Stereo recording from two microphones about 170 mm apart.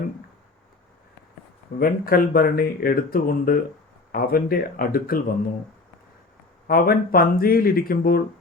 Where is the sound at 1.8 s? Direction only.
60° left (ahead or behind).